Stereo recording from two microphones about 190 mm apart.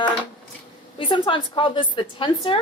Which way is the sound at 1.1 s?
25° left (ahead or behind).